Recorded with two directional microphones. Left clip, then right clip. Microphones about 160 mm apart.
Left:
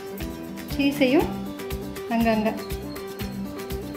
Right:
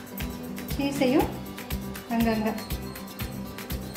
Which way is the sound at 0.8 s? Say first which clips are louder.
Left 4 dB; 50° left (ahead or behind).